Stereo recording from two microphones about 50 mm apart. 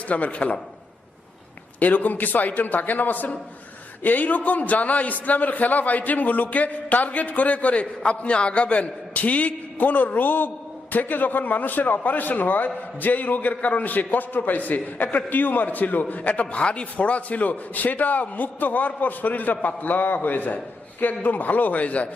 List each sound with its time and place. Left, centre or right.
0.1 s a man's voice: left
1.8 s a man's voice: left